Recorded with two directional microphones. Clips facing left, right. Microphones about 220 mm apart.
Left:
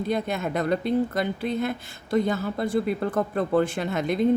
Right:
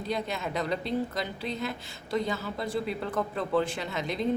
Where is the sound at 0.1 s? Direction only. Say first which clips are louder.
Left 3 dB; 50° left (ahead or behind).